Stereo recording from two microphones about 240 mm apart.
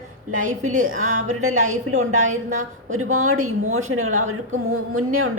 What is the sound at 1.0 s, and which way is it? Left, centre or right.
A woman's voice, right.